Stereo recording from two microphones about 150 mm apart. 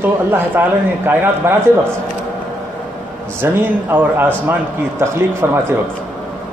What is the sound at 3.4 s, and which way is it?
A man's voice, 15° right (ahead or behind).